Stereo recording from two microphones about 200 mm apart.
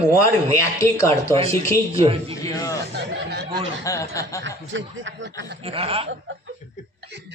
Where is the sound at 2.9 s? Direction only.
55° right (ahead or behind).